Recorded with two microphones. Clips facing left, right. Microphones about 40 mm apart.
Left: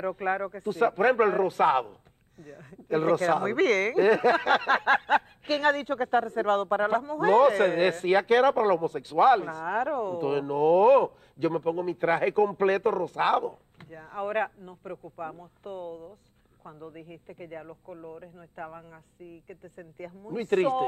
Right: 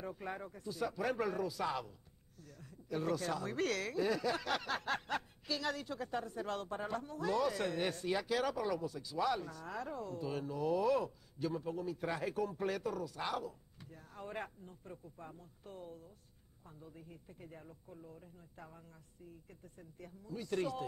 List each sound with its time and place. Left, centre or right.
0.0 s speech: left
19.8 s speech: left